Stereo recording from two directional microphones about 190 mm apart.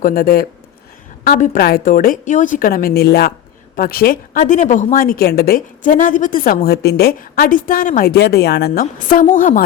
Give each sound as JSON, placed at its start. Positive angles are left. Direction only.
{"t": 0.0, "sound": "a woman's voice", "side_deg": 50}
{"t": 1.5, "sound": "a woman's voice", "side_deg": 50}